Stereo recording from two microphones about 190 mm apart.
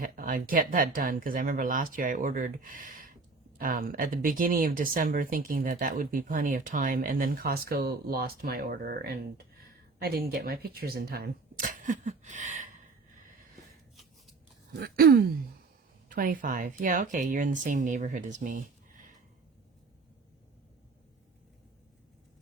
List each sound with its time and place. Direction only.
0.0 s speech: 45° right (ahead or behind)
13.9 s shuffling cards: centre (ahead or behind)
14.8 s speech: 55° right (ahead or behind)